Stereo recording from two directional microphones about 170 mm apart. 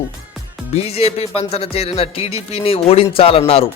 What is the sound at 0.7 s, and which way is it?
A man's voice, 35° left (ahead or behind).